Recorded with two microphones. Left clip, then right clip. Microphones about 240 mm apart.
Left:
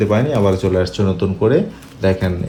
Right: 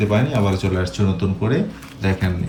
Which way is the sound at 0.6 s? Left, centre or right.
Centre.